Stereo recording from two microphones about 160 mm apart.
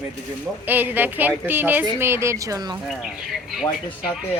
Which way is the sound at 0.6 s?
10° right (ahead or behind).